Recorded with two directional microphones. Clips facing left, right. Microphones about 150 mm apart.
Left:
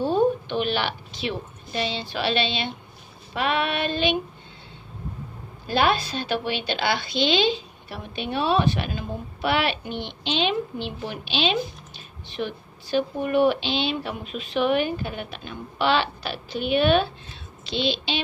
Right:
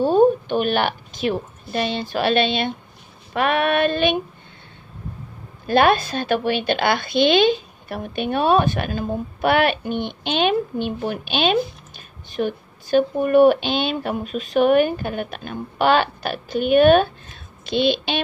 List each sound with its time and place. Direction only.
0.0 s a woman's voice: 45° right (ahead or behind)
5.7 s a woman's voice: 55° right (ahead or behind)